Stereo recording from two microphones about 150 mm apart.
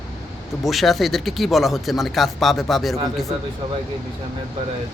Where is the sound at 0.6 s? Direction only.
Centre (ahead or behind).